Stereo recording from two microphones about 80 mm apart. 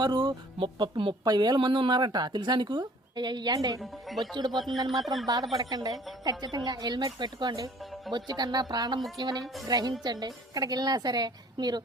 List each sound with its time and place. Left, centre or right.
0.0 s speech: right
1.2 s speech: right
3.8 s speech: centre
4.4 s speech: right